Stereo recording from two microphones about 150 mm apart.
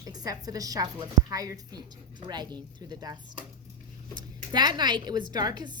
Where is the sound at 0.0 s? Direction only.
25° right (ahead or behind).